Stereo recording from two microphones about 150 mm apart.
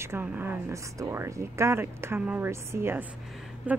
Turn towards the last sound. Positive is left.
turn(degrees=-10)  # may be behind; listen again after turning